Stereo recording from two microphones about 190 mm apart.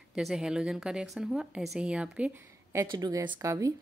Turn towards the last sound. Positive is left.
turn(degrees=-15)  # may be behind; listen again after turning